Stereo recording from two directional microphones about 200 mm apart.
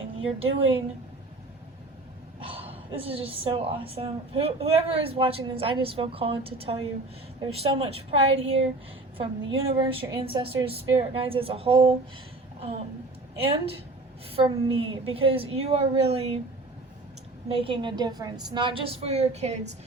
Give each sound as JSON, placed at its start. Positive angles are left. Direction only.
{"t": 0.3, "sound": "a woman's voice", "side_deg": -30}
{"t": 2.4, "sound": "a sound", "side_deg": -25}
{"t": 2.9, "sound": "a woman's voice", "side_deg": -30}
{"t": 13.4, "sound": "a woman's voice", "side_deg": -30}
{"t": 17.5, "sound": "a woman's voice", "side_deg": -25}